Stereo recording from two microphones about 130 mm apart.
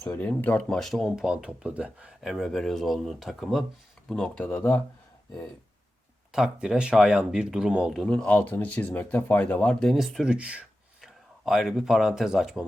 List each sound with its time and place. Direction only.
0.0 s speech: 15° left (ahead or behind)
6.3 s speech: 5° right (ahead or behind)
8.0 s speech: 5° left (ahead or behind)